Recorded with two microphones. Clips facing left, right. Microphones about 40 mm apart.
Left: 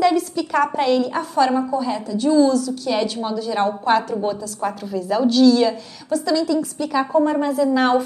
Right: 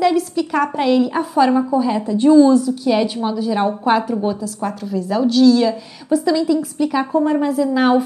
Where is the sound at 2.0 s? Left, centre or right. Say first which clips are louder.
Right 5 dB; right; by 5.7 s centre.